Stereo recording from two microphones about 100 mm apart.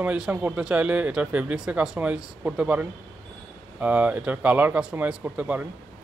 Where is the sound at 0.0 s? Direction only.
15° right (ahead or behind).